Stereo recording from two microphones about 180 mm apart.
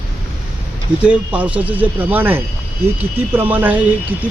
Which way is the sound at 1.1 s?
5° right (ahead or behind).